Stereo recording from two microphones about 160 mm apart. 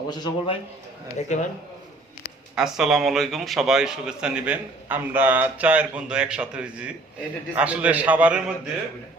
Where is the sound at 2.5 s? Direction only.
5° right (ahead or behind).